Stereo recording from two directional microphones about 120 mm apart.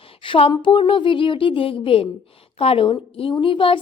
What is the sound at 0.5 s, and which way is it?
A woman's voice, 45° left (ahead or behind).